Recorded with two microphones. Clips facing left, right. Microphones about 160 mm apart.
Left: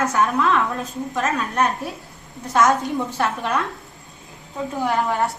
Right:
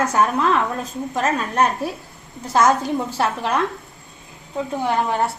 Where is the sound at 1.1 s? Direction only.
35° right (ahead or behind).